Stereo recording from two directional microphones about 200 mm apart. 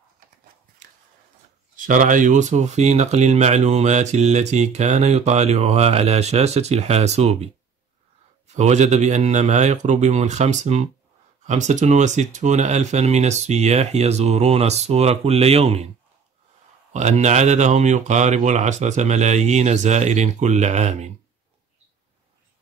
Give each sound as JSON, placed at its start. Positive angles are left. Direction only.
{"t": 1.9, "sound": "speech", "side_deg": -40}
{"t": 8.5, "sound": "speech", "side_deg": -35}
{"t": 16.9, "sound": "speech", "side_deg": -35}